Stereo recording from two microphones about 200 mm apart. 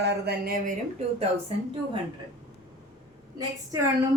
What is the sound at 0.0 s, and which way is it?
Speech, 55° right (ahead or behind).